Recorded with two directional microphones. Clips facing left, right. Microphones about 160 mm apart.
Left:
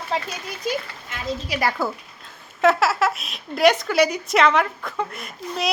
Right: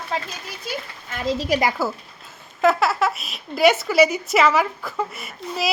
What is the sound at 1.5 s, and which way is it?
Speech, 45° right (ahead or behind).